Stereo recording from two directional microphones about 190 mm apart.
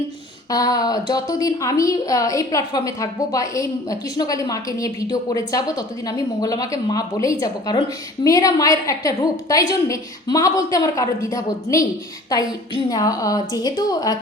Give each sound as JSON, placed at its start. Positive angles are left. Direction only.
{"t": 0.5, "sound": "a woman's voice", "side_deg": 20}